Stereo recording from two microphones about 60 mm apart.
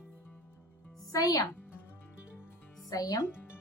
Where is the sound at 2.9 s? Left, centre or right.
Left.